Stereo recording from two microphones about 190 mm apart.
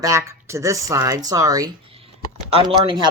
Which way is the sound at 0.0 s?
15° right (ahead or behind).